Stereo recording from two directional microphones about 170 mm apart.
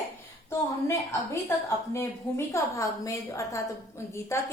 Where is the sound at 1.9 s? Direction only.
15° left (ahead or behind).